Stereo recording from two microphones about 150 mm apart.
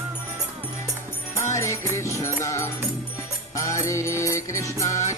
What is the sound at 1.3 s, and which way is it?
Music, 20° left (ahead or behind).